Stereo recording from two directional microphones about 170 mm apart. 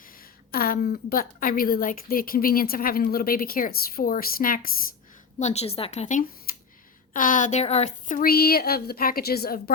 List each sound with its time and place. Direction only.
0.5 s a woman's voice: 60° left (ahead or behind)
5.4 s a woman's voice: 40° left (ahead or behind); by 9.7 s 65° left (ahead or behind)